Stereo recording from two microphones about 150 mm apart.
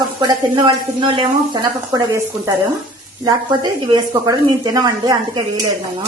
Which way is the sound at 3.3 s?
25° right (ahead or behind).